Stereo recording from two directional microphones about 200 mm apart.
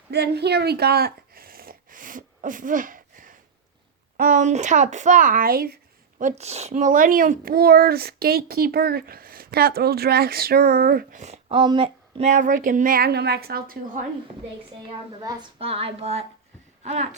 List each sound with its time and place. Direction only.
0.1 s a sound: 55° right (ahead or behind)
4.2 s speech: 40° right (ahead or behind)
15.2 s speech: 25° right (ahead or behind)